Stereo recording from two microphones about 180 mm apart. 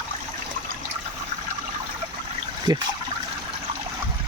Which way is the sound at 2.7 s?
20° right (ahead or behind).